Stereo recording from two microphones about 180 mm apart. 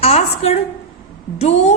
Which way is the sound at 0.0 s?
35° left (ahead or behind).